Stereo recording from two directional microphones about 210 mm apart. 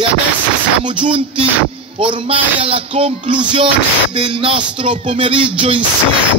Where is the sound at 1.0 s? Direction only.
25° right (ahead or behind).